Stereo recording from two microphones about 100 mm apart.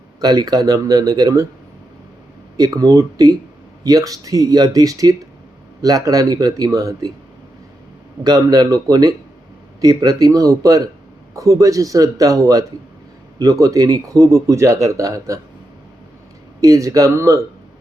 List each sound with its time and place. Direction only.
0.2 s speech: 40° right (ahead or behind)
2.6 s speech: 40° right (ahead or behind)
8.2 s speech: 40° right (ahead or behind)
16.6 s speech: 35° right (ahead or behind)